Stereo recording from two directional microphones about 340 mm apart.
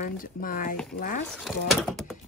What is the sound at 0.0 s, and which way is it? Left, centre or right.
Speech, left.